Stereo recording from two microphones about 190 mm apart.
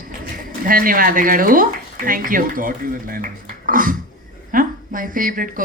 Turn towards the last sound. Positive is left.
turn(degrees=-45)  # may be behind; listen again after turning